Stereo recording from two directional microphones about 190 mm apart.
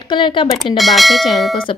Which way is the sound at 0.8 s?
Centre (ahead or behind).